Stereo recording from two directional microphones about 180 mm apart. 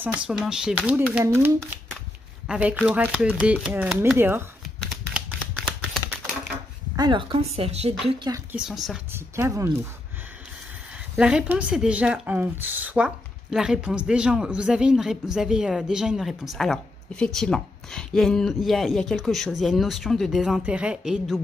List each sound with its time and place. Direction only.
0.0 s speech: 5° right (ahead or behind)
7.0 s a woman's voice: 25° right (ahead or behind)
8.5 s speech: 5° right (ahead or behind)
9.1 s speech: 15° right (ahead or behind)
11.1 s speech: 5° right (ahead or behind)